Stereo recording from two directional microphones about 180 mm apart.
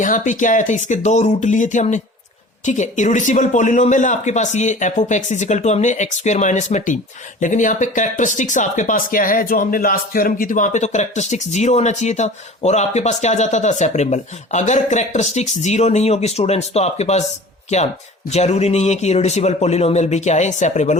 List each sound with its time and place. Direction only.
0.0 s speech: 45° left (ahead or behind)
18.3 s speech: 35° left (ahead or behind)